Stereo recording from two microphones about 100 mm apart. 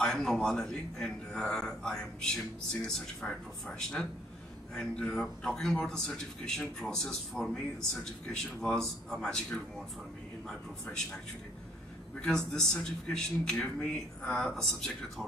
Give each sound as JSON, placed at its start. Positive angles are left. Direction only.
{"t": 0.0, "sound": "a man's voice", "side_deg": 5}
{"t": 12.2, "sound": "a man's voice", "side_deg": 10}